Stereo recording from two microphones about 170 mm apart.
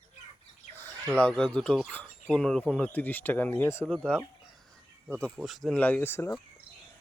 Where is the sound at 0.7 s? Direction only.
10° left (ahead or behind).